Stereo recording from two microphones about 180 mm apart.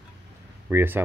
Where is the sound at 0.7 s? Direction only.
10° right (ahead or behind).